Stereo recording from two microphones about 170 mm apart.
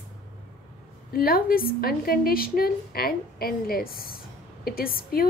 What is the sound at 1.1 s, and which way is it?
A woman's voice, 60° left (ahead or behind).